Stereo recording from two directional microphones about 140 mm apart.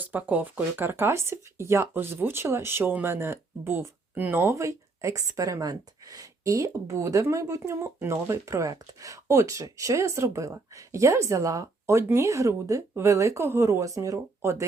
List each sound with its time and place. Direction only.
0.0 s speech: 10° right (ahead or behind)